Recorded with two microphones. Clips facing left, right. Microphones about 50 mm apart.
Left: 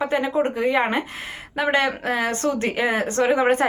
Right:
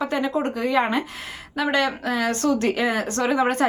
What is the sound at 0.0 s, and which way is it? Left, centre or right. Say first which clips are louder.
A woman's voice: left 2 dB; left.